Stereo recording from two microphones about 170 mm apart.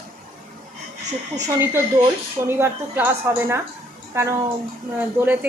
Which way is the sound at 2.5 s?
15° right (ahead or behind).